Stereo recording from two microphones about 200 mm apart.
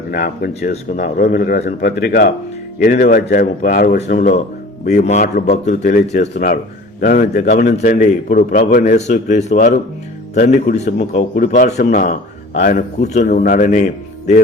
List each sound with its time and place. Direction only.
0.1 s speech: 50° left (ahead or behind)
4.9 s a man's voice: 35° left (ahead or behind)